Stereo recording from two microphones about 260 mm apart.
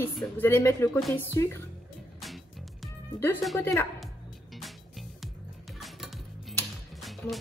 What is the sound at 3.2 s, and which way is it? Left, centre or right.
Speech, centre.